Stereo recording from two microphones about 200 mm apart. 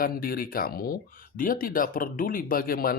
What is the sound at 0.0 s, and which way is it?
Speech, 45° left (ahead or behind).